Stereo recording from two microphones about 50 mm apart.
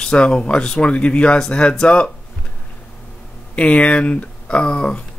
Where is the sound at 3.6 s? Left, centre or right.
Left.